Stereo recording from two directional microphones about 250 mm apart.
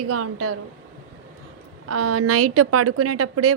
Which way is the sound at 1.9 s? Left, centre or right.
Right.